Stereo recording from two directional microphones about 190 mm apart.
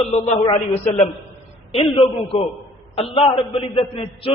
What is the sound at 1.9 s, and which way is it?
A man's voice, 30° left (ahead or behind).